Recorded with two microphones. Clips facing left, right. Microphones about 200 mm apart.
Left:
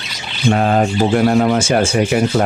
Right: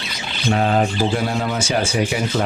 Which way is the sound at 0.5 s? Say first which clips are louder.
Left 2 dB; 45° left (ahead or behind).